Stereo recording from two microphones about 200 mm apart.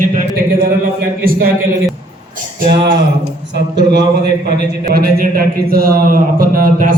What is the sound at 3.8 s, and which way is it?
A man's voice, 55° right (ahead or behind).